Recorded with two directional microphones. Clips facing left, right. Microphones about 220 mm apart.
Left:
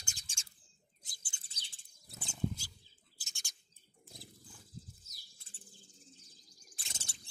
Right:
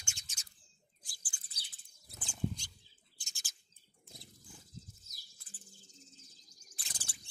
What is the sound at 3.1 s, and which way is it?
Bird, centre (ahead or behind).